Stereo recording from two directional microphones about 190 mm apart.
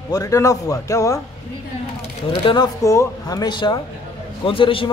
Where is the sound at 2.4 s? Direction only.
20° left (ahead or behind).